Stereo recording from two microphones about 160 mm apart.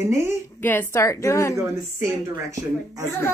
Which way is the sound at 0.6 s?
15° left (ahead or behind).